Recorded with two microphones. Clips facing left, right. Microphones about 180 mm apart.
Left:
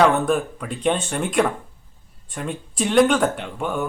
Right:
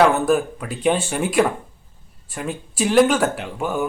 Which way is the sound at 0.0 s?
5° right (ahead or behind).